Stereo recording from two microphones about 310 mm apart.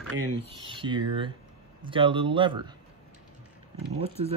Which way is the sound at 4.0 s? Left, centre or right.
Centre.